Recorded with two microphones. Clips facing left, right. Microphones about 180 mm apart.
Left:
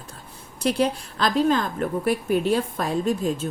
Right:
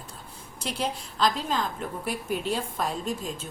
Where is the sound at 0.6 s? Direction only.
60° left (ahead or behind).